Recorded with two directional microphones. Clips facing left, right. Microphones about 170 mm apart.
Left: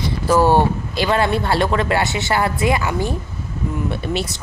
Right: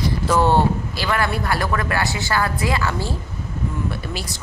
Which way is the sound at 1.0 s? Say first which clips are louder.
Left 4 dB; 25° left (ahead or behind).